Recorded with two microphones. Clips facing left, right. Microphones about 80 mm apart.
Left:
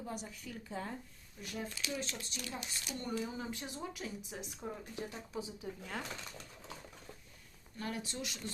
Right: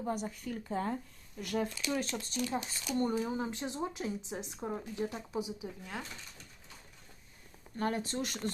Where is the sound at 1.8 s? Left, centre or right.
Right.